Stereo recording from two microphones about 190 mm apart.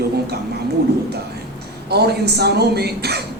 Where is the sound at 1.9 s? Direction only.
60° right (ahead or behind).